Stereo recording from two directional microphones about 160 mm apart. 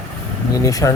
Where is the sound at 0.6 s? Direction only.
20° left (ahead or behind).